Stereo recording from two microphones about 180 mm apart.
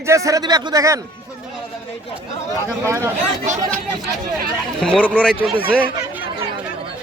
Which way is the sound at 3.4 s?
40° right (ahead or behind).